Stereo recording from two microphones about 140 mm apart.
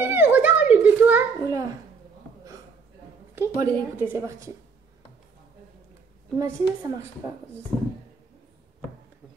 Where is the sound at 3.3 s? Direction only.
20° right (ahead or behind).